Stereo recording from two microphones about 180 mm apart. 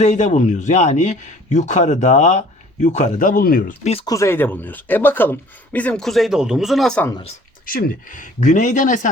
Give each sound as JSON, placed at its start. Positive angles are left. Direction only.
{"t": 0.0, "sound": "speech", "side_deg": 40}
{"t": 4.0, "sound": "speech", "side_deg": 15}
{"t": 7.6, "sound": "speech", "side_deg": 50}